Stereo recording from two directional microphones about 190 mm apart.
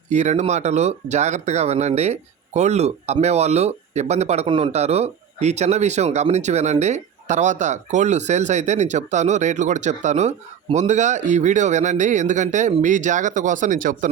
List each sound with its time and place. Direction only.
0.1 s speech: 40° right (ahead or behind)